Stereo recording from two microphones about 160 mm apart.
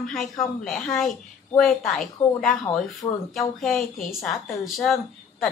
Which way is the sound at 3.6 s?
Centre (ahead or behind).